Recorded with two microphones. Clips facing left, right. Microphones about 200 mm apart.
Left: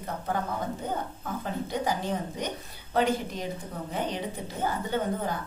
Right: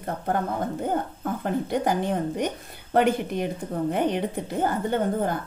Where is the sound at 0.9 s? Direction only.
55° right (ahead or behind).